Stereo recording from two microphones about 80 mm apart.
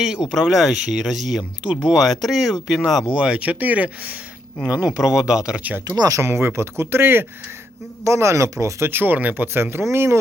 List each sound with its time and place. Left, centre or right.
0.3 s speech: centre; by 6.0 s right
6.0 s speech: right